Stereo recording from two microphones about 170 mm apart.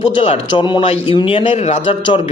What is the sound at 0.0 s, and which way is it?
A man's voice, 35° left (ahead or behind).